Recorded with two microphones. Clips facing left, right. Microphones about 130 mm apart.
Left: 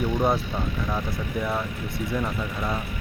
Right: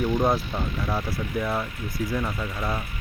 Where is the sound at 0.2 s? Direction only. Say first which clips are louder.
Even; centre (ahead or behind).